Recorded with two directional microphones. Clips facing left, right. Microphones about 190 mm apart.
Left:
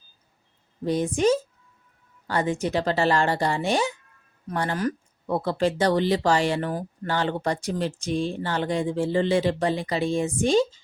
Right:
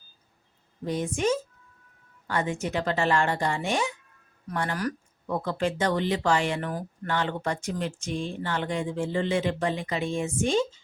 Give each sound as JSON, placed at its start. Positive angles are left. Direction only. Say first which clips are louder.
{"t": 0.9, "sound": "speech", "louder": "left 5 dB", "side_deg": 35}